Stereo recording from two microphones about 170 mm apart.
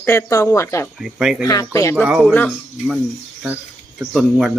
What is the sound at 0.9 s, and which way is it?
Speech, centre (ahead or behind).